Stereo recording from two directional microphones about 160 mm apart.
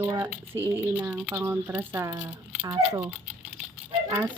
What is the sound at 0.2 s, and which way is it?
Speech, 15° right (ahead or behind).